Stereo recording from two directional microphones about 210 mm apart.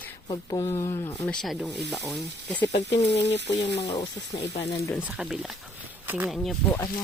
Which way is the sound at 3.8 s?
20° left (ahead or behind).